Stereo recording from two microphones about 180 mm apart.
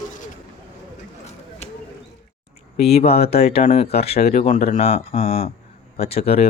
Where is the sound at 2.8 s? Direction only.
35° left (ahead or behind).